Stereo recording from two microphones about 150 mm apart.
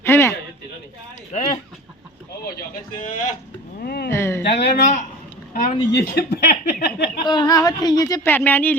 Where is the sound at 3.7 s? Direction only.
90° left.